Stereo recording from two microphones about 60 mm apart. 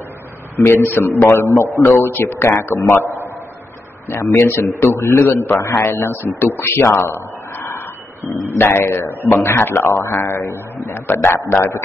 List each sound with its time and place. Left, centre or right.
0.8 s speech: left
1.2 s a man's voice: left
1.9 s a man's voice: left
4.4 s a man's voice: left
8.2 s a man's voice: left
10.9 s speech: left